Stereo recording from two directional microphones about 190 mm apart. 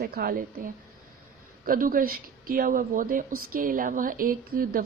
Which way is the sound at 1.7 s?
45° right (ahead or behind).